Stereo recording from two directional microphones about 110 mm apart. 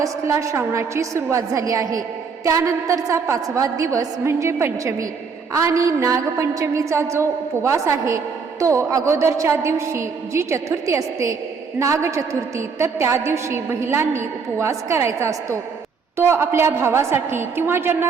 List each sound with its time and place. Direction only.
0.0 s a woman's voice: 30° right (ahead or behind)